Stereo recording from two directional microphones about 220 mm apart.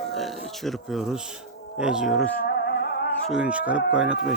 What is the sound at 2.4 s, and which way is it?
Music, 45° left (ahead or behind).